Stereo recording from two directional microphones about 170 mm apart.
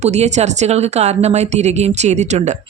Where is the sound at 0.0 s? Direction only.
40° right (ahead or behind).